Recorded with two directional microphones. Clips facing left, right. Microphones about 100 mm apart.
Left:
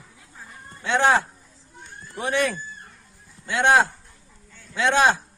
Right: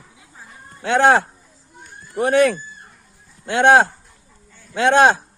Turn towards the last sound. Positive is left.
turn(degrees=-55)  # may be behind; listen again after turning